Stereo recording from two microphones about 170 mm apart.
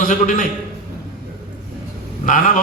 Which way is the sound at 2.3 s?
50° left (ahead or behind).